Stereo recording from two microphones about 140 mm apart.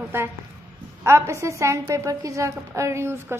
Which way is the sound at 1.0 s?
20° right (ahead or behind).